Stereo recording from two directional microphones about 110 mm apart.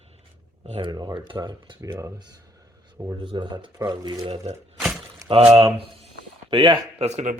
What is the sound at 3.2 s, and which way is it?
Speech, 45° right (ahead or behind).